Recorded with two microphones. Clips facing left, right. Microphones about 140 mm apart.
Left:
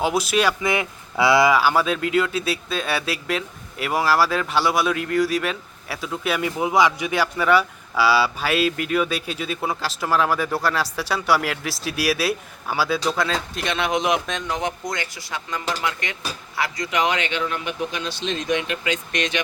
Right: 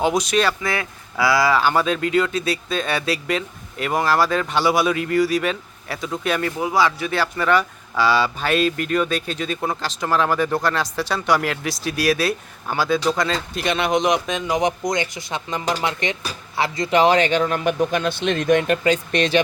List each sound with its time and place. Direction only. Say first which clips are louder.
0.0 s speech: right 1 dB; 5° left (ahead or behind); by 1.5 s 20° left (ahead or behind)
1.5 s speech: right 1 dB; 5° left (ahead or behind)
6.6 s speech: left 3 dB; 20° left (ahead or behind); by 19.4 s 35° right (ahead or behind)